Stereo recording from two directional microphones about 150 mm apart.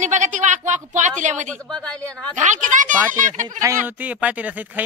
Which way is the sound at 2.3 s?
55° right (ahead or behind).